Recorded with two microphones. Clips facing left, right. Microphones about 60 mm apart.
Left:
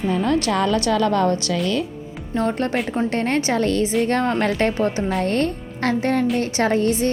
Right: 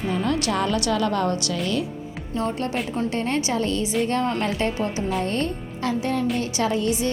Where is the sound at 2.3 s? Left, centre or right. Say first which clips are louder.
Left 4 dB; left.